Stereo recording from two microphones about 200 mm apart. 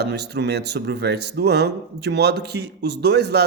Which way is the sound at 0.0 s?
55° right (ahead or behind).